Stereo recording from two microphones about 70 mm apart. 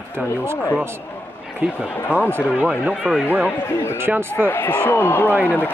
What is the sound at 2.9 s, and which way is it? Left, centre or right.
Speech, centre.